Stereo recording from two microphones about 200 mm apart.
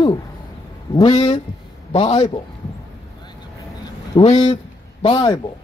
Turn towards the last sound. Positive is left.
turn(degrees=20)  # may be behind; listen again after turning